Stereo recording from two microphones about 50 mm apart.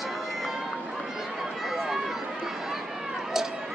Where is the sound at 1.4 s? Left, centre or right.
Centre.